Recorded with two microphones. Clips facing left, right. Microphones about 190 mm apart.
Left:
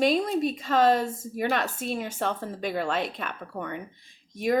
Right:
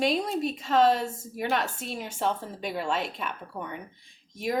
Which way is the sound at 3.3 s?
50° left (ahead or behind).